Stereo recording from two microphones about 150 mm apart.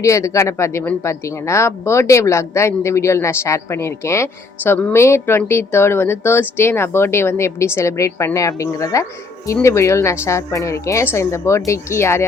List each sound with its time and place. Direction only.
0.0 s a man's voice: 20° left (ahead or behind)